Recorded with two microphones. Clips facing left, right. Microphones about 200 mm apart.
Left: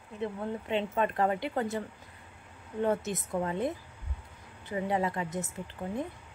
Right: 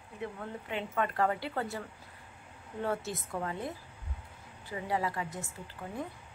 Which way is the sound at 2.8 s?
20° left (ahead or behind).